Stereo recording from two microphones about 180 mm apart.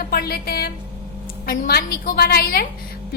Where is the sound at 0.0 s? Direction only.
55° left (ahead or behind).